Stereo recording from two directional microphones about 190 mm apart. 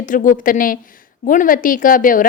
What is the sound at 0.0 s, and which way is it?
A woman's voice, 45° left (ahead or behind).